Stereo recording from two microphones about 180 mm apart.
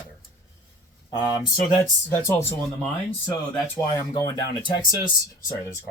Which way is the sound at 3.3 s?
25° left (ahead or behind).